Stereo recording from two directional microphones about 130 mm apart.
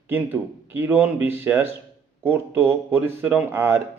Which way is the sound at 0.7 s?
15° right (ahead or behind).